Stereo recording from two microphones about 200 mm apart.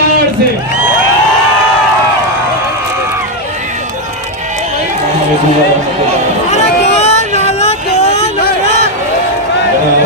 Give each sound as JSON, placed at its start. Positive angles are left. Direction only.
{"t": 6.5, "sound": "vehicle", "side_deg": 35}